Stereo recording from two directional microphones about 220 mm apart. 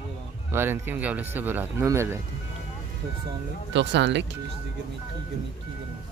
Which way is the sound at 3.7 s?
55° right (ahead or behind).